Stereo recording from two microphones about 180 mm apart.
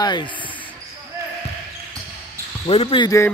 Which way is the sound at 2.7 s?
30° left (ahead or behind).